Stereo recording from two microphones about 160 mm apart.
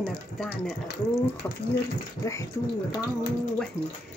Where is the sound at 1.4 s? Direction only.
15° left (ahead or behind).